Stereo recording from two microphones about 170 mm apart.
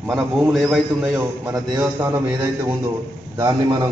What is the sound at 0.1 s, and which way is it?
A man's voice, centre (ahead or behind).